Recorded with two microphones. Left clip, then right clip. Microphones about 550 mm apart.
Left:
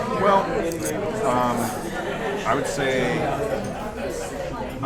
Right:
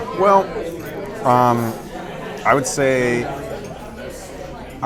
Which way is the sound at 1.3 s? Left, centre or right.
Right.